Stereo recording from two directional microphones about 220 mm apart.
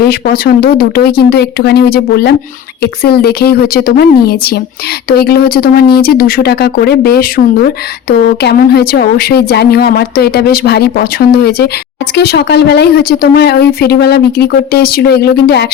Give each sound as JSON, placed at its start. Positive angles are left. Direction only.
{"t": 0.0, "sound": "a woman's voice", "side_deg": 45}